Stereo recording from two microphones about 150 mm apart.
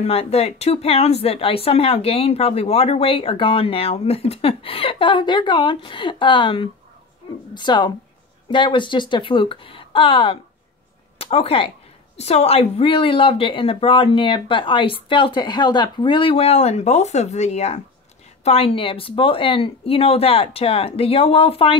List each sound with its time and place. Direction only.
0.0 s speech: 45° left (ahead or behind)